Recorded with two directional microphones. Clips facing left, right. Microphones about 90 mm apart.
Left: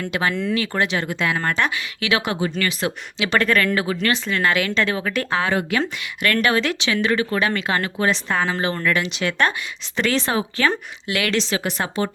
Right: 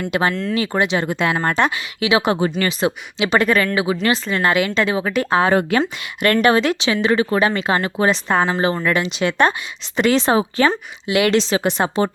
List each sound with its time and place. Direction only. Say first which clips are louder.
0.1 s speech: right 2 dB; 30° right (ahead or behind)
3.2 s speech: right 2 dB; 15° right (ahead or behind)
5.4 s a woman's voice: right 6 dB; 35° right (ahead or behind)